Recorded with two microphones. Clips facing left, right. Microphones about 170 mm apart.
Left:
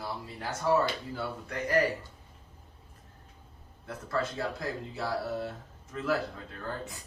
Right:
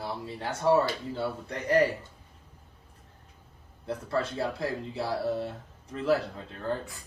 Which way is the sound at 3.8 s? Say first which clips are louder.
Right 3 dB; 30° right (ahead or behind).